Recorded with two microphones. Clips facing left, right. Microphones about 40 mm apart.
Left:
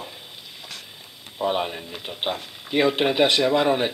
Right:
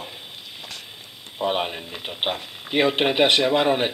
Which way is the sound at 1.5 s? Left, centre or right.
Right.